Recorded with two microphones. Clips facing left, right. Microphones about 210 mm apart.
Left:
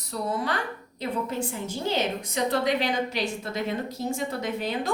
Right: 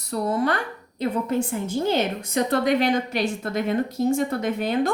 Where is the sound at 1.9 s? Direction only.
50° right (ahead or behind).